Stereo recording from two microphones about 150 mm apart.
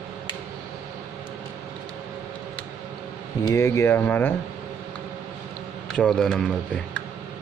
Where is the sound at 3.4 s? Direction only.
20° left (ahead or behind).